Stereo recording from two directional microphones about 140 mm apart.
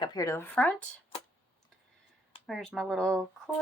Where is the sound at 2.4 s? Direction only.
Centre (ahead or behind).